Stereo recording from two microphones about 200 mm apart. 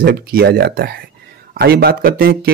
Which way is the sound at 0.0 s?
50° right (ahead or behind).